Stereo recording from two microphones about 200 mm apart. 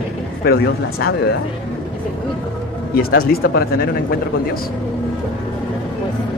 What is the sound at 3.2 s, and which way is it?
Speech, 50° left (ahead or behind).